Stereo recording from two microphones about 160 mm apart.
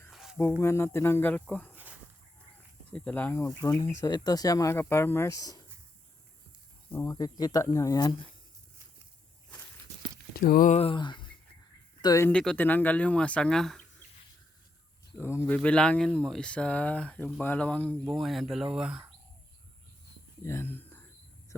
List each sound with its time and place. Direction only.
0.1 s a sound: centre (ahead or behind)
0.6 s speech: 15° left (ahead or behind)
2.9 s speech: 10° left (ahead or behind); by 5.6 s 25° left (ahead or behind)
6.9 s speech: 20° left (ahead or behind)
10.3 s a sound: 65° left (ahead or behind)
10.7 s speech: 35° left (ahead or behind)
12.0 s speech: 20° left (ahead or behind)
12.3 s speech: 5° left (ahead or behind)
15.2 s speech: 15° left (ahead or behind); by 19.0 s 5° right (ahead or behind)
20.4 s speech: 15° left (ahead or behind)